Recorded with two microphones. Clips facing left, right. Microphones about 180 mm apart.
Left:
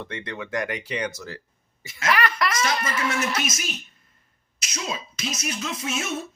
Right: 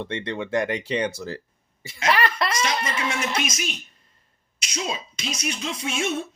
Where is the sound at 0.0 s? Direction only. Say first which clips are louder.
Right 5 dB; 30° right (ahead or behind).